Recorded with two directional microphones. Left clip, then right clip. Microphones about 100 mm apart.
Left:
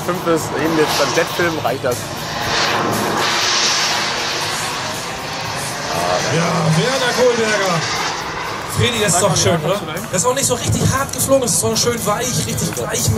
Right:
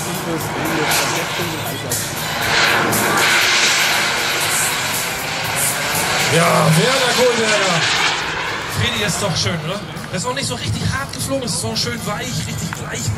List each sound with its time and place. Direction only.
0.7 s speech: centre (ahead or behind)
2.5 s vehicle: centre (ahead or behind)
6.0 s speech: 5° right (ahead or behind)
8.8 s speech: 35° left (ahead or behind)